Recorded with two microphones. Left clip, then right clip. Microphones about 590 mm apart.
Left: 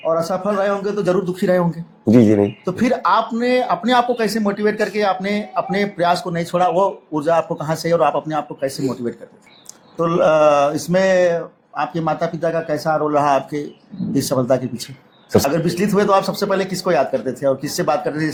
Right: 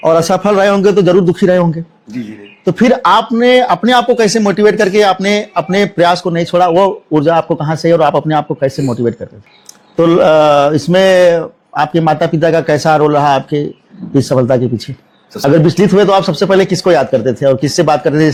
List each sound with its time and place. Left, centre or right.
0.1 s a man's voice: right
2.6 s a man's voice: right